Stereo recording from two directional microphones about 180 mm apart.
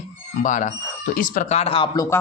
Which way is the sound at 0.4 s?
45° left (ahead or behind).